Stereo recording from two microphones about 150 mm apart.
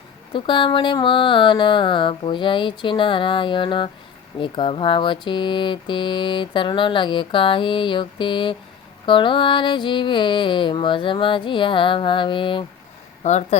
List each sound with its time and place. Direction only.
0.3 s mantra: 35° left (ahead or behind)
13.2 s speech: 50° left (ahead or behind)